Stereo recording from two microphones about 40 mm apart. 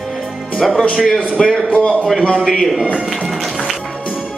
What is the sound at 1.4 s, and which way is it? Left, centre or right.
Speech, centre.